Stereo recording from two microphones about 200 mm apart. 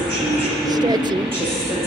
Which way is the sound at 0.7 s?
20° right (ahead or behind).